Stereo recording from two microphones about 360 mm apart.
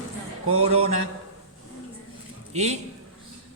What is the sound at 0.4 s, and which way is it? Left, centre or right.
Speech, right.